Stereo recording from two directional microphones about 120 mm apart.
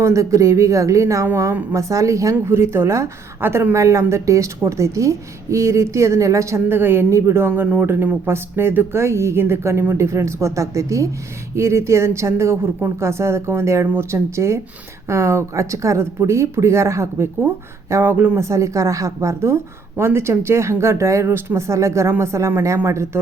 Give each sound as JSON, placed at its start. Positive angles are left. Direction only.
{"t": 0.0, "sound": "a woman's voice", "side_deg": -25}